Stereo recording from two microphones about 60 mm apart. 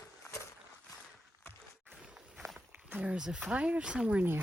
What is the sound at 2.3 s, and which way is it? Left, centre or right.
Walk, centre.